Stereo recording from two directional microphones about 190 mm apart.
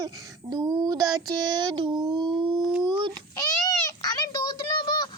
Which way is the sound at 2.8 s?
25° right (ahead or behind).